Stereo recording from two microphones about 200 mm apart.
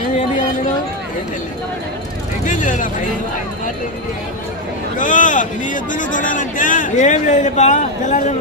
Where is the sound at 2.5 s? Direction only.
40° left (ahead or behind).